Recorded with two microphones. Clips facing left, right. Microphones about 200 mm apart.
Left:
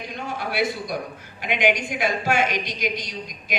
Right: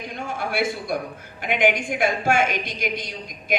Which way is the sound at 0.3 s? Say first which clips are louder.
Even; 50° right (ahead or behind).